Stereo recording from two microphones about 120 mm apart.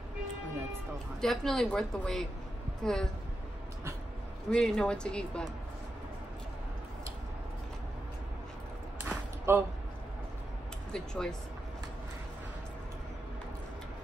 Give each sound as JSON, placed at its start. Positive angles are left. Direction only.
{"t": 1.2, "sound": "a woman's voice", "side_deg": 5}
{"t": 4.5, "sound": "speech", "side_deg": 5}
{"t": 9.5, "sound": "a man's voice", "side_deg": -20}
{"t": 10.9, "sound": "a woman's voice", "side_deg": 5}